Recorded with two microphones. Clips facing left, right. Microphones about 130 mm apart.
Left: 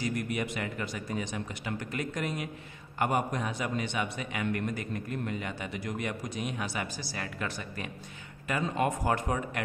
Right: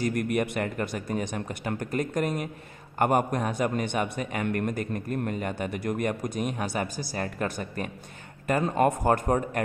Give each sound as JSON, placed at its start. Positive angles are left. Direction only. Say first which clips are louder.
{"t": 0.0, "sound": "a man's voice", "louder": "right 6 dB", "side_deg": -55}